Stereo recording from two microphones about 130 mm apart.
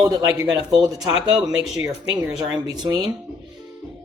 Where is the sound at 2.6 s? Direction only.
30° right (ahead or behind).